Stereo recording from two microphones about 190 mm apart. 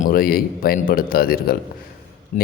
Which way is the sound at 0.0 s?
50° left (ahead or behind).